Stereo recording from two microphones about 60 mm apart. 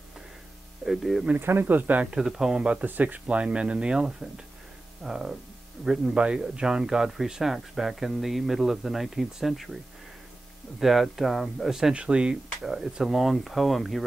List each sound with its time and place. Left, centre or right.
0.8 s speech: centre
1.4 s speech: right
2.0 s speech: centre
2.8 s speech: right; by 9.8 s centre
10.8 s speech: centre
11.9 s speech: centre